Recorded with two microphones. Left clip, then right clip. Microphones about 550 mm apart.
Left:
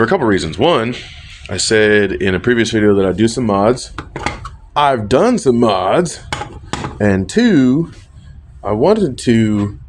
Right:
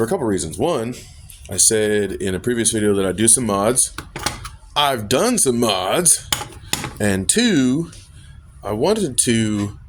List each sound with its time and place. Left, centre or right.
0.0 s speech: right
6.7 s dishes: right
8.6 s speech: right